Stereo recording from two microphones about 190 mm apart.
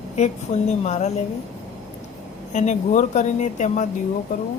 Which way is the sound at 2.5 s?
40° left (ahead or behind).